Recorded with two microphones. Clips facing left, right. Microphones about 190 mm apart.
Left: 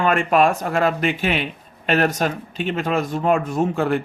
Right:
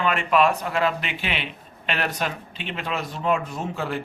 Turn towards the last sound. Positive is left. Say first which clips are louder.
# left 9 dB
turn(degrees=50)  # may be behind; listen again after turning